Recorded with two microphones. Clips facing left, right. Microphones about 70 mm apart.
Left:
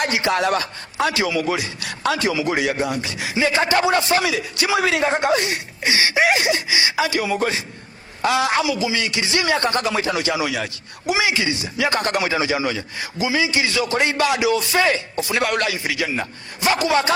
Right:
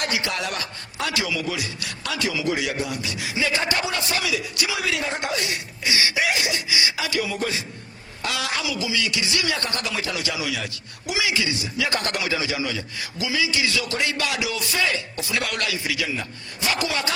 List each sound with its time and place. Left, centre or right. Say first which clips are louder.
0.0 s a man's voice: left 7 dB; left